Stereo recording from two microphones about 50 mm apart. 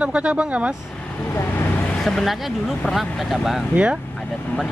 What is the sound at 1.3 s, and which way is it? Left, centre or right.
Vehicle, left.